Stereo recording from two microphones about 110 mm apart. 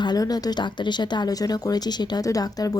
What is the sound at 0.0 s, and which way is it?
Speech, 40° left (ahead or behind).